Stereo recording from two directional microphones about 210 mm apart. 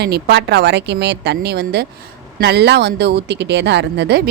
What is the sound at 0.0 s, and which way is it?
Speech, 50° right (ahead or behind).